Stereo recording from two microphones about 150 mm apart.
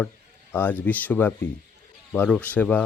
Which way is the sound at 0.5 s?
10° left (ahead or behind).